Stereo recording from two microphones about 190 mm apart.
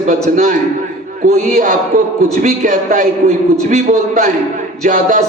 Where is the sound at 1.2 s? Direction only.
45° right (ahead or behind).